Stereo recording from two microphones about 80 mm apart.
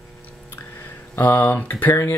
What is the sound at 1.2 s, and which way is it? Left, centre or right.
Speech, left.